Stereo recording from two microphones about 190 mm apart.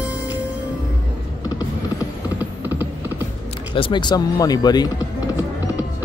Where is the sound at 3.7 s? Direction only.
25° left (ahead or behind).